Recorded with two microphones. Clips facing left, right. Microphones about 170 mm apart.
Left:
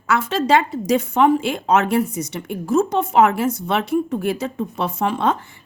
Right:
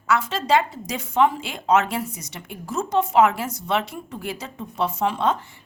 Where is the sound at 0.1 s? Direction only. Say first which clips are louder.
Left 3 dB; 60° left (ahead or behind).